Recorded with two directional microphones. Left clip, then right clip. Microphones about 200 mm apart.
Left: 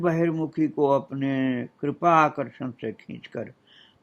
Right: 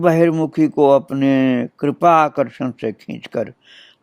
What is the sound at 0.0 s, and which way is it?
Speech, 50° right (ahead or behind).